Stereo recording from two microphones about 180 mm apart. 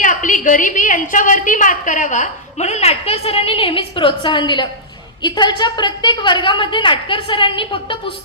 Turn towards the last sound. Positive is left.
turn(degrees=30)  # may be behind; listen again after turning